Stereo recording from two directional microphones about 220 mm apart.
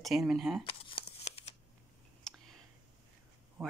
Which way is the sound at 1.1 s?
30° left (ahead or behind).